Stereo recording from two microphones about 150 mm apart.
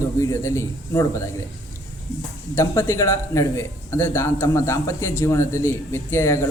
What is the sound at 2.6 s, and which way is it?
A man's voice, 15° left (ahead or behind).